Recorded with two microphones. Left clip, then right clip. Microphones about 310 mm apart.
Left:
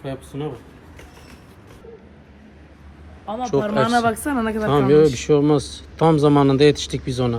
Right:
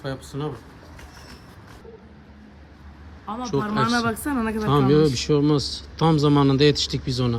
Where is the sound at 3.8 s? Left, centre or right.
Centre.